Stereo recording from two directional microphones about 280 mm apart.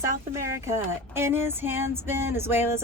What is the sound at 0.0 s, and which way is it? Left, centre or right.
A woman's voice, centre.